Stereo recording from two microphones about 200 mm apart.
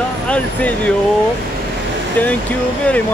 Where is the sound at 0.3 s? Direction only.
5° left (ahead or behind).